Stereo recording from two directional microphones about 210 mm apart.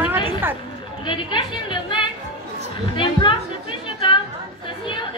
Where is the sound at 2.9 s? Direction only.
25° left (ahead or behind).